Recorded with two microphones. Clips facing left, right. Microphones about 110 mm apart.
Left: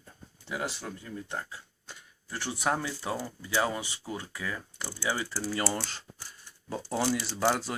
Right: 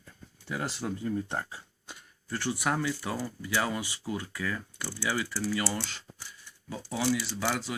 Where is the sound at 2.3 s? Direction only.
20° left (ahead or behind); by 7.8 s 35° left (ahead or behind).